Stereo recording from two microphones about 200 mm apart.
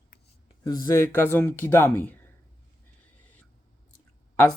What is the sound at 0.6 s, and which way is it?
Speech, 20° left (ahead or behind).